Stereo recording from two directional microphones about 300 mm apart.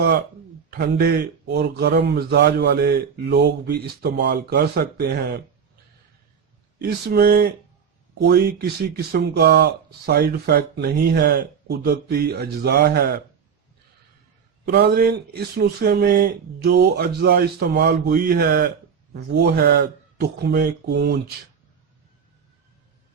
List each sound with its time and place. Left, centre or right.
0.7 s a man's voice: right
6.7 s a man's voice: right
14.6 s a man's voice: right